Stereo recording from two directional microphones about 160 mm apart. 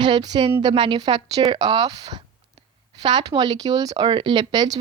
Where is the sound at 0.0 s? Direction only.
25° right (ahead or behind).